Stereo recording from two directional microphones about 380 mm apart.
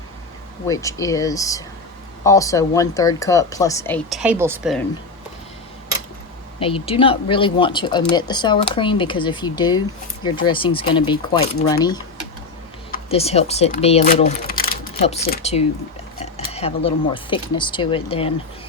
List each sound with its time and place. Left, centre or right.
0.7 s speech: centre
6.6 s speech: centre